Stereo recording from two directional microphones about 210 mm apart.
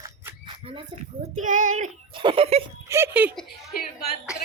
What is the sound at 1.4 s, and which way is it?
Child singing, 35° right (ahead or behind).